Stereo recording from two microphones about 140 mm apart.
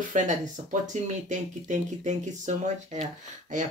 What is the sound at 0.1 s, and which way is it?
Speech, 65° right (ahead or behind).